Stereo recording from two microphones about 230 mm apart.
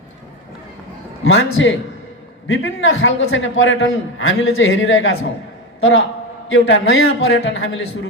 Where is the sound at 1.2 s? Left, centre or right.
Left.